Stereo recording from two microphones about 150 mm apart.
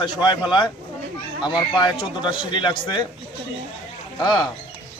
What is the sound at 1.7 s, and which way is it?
A man's voice, 30° left (ahead or behind).